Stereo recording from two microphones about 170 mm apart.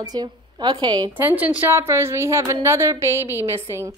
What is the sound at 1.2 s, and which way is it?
A woman's voice, 10° right (ahead or behind).